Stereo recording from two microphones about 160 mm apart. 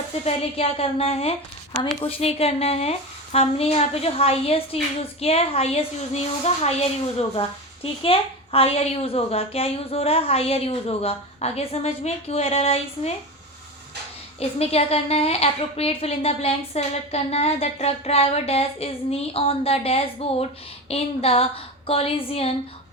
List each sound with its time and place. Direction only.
0.1 s a woman's voice: 40° left (ahead or behind)
14.3 s a woman's voice: 40° left (ahead or behind)